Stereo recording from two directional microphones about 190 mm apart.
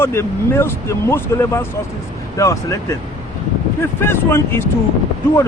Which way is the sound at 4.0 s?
10° left (ahead or behind).